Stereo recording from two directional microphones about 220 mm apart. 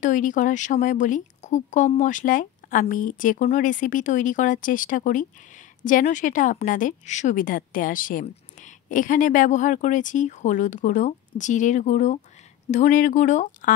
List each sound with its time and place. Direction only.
0.0 s a woman's voice: 35° left (ahead or behind)